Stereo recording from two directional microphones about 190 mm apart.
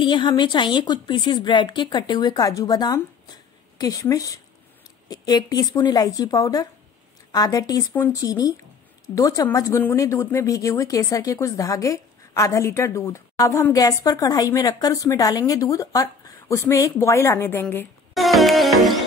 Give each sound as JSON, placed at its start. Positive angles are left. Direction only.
{"t": 0.0, "sound": "a woman's voice", "side_deg": 25}
{"t": 18.1, "sound": "music", "side_deg": 0}